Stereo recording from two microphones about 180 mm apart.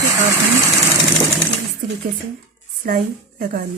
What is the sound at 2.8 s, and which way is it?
Speech, 50° right (ahead or behind).